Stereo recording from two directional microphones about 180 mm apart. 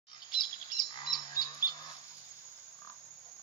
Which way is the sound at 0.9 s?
25° left (ahead or behind).